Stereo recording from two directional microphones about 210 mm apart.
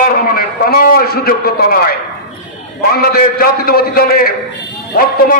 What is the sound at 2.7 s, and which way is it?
A man's voice, 45° left (ahead or behind).